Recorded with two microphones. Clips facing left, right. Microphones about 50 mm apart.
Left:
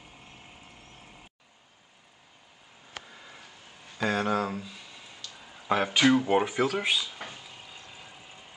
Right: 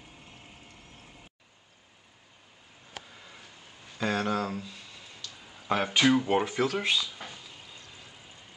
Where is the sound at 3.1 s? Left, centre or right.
Centre.